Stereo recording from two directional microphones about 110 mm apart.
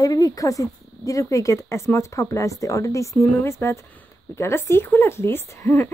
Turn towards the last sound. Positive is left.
turn(degrees=25)  # may be behind; listen again after turning